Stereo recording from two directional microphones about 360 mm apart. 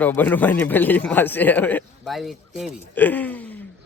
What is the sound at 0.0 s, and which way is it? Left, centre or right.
A man's voice, centre.